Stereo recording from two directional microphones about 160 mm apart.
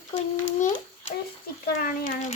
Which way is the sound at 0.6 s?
50° left (ahead or behind).